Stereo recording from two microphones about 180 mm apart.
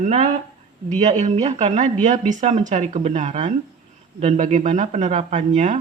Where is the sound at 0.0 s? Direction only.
40° right (ahead or behind).